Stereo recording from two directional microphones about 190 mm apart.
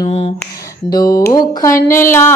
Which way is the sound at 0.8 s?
20° left (ahead or behind).